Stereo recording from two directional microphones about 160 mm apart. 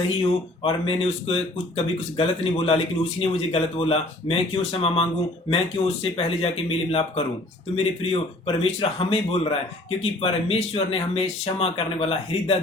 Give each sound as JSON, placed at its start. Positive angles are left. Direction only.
{"t": 0.2, "sound": "speech", "side_deg": 35}